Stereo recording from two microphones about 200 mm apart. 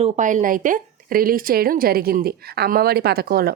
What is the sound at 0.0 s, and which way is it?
A woman's voice, 35° right (ahead or behind).